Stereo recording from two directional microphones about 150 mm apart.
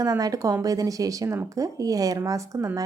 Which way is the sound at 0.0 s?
25° right (ahead or behind).